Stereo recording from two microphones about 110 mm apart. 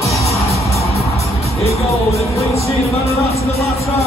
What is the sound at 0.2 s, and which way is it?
Music, 70° left (ahead or behind).